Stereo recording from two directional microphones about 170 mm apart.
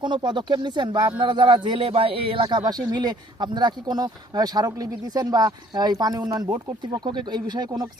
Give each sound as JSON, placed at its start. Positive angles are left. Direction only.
{"t": 0.0, "sound": "speech", "side_deg": -25}